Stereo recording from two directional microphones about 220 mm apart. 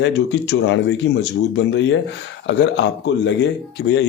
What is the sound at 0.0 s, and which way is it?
Speech, 50° left (ahead or behind).